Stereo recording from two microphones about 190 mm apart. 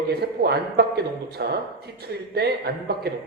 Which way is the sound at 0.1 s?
60° right (ahead or behind).